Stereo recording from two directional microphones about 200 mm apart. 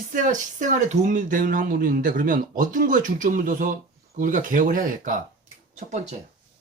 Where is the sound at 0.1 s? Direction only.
40° right (ahead or behind).